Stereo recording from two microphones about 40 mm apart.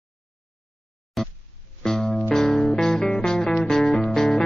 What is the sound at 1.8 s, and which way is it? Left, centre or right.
Music, centre.